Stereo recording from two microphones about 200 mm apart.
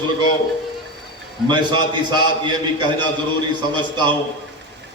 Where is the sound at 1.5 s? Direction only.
20° right (ahead or behind).